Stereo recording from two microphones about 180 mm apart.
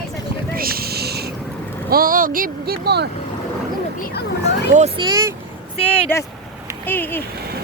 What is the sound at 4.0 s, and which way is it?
Speech, 60° left (ahead or behind).